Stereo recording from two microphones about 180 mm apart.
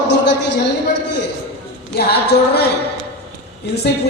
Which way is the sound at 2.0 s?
65° left (ahead or behind).